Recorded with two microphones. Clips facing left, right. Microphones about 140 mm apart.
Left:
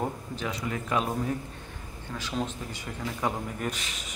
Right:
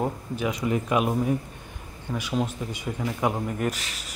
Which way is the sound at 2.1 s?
10° right (ahead or behind).